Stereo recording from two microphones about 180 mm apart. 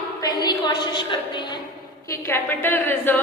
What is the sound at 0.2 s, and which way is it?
A woman's voice, 20° left (ahead or behind).